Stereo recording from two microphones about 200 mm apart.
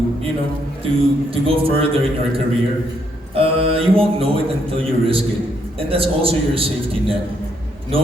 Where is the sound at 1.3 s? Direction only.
30° right (ahead or behind).